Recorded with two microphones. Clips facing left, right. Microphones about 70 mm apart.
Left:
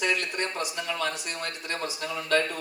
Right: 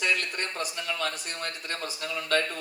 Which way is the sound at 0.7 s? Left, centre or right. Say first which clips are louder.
Even; left.